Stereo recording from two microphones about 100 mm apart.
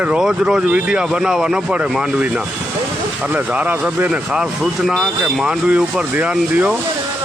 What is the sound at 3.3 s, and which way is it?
Speech, 15° right (ahead or behind).